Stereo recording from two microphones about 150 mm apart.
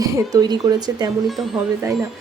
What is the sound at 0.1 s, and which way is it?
Speech, 25° right (ahead or behind).